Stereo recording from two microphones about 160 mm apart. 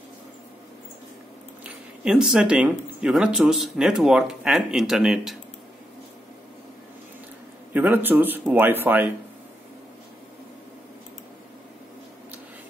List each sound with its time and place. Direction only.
1.6 s speech: 5° right (ahead or behind)
7.7 s speech: 10° right (ahead or behind)